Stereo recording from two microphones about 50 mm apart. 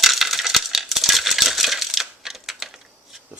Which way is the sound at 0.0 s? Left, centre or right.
Centre.